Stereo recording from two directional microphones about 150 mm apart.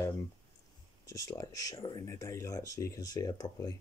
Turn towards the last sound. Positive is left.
turn(degrees=25)  # may be behind; listen again after turning